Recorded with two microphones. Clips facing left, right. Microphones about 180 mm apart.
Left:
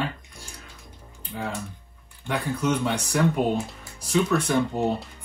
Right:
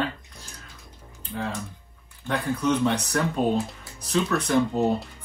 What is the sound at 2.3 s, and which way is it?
Speech, 10° left (ahead or behind).